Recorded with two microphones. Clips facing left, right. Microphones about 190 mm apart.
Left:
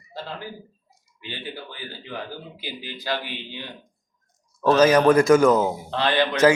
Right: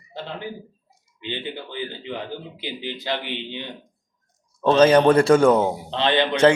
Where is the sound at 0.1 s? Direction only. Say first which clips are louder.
Right 2 dB; 20° right (ahead or behind).